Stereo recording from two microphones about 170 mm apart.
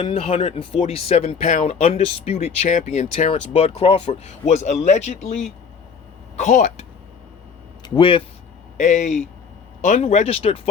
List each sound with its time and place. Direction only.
0.0 s speech: 35° left (ahead or behind)
6.3 s speech: 45° left (ahead or behind)
7.8 s speech: 30° left (ahead or behind)
8.8 s speech: 45° left (ahead or behind)